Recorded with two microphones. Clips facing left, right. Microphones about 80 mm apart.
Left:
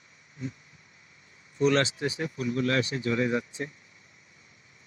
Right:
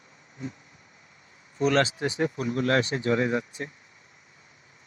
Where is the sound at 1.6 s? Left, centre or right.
Right.